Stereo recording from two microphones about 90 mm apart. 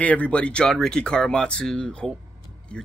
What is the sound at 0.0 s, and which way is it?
A man's voice, 15° left (ahead or behind).